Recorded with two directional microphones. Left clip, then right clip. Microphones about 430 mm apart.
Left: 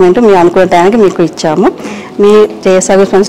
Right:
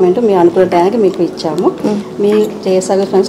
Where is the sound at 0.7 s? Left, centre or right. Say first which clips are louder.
Left 5 dB; left.